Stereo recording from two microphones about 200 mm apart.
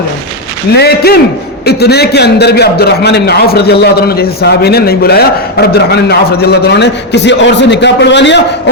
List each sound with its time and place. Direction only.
0.7 s a man's voice: 55° left (ahead or behind)